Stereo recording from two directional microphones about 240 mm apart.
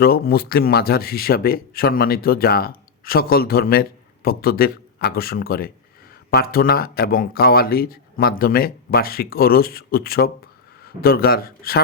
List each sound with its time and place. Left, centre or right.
0.0 s a man's voice: left